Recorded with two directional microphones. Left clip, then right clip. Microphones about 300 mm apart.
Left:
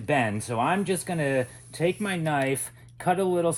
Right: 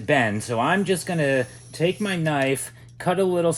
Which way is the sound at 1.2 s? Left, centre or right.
Left.